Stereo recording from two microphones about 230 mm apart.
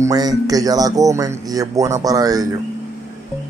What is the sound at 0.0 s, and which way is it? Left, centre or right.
Speech, centre.